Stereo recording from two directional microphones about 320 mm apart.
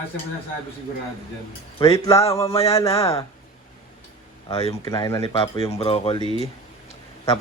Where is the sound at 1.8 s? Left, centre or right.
Centre.